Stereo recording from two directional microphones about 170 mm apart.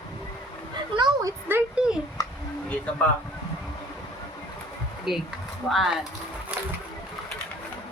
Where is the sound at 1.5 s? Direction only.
10° right (ahead or behind).